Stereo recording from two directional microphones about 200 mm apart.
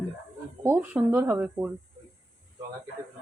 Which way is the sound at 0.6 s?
10° right (ahead or behind).